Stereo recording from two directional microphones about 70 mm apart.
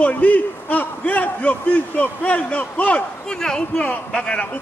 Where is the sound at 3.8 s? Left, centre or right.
Left.